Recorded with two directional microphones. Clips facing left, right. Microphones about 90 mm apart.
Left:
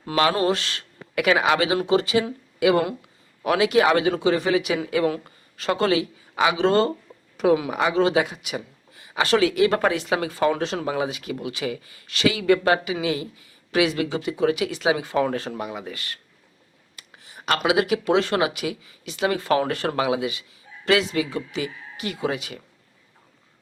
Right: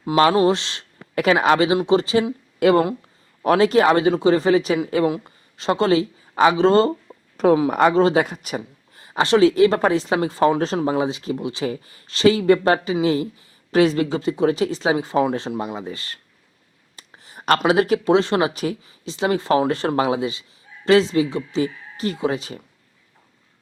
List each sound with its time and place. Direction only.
0.2 s speech: 25° right (ahead or behind)
1.1 s speech: 35° right (ahead or behind)
2.6 s speech: 45° right (ahead or behind)
5.0 s speech: 20° right (ahead or behind)
7.7 s speech: 50° right (ahead or behind)
9.2 s speech: 30° right (ahead or behind)
16.9 s a sound: 35° right (ahead or behind)
17.7 s speech: 40° right (ahead or behind)